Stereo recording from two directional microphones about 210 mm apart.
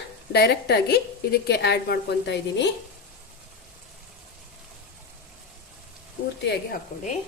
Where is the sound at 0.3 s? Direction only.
50° left (ahead or behind).